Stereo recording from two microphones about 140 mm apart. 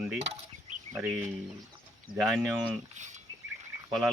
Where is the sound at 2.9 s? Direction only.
60° right (ahead or behind).